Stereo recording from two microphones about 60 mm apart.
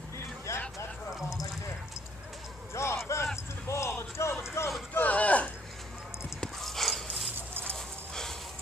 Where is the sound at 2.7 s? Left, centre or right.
Left.